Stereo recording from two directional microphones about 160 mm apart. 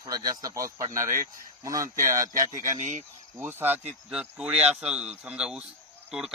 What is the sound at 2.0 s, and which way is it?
Speech, 20° right (ahead or behind).